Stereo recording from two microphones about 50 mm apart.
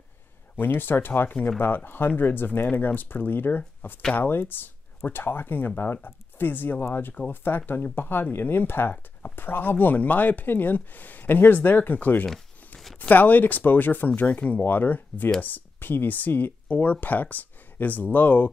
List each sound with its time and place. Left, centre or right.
0.6 s speech: left
12.3 s tearing: centre
13.1 s speech: left